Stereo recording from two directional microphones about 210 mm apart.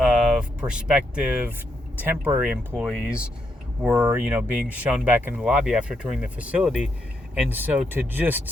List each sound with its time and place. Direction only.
0.0 s speech: centre (ahead or behind)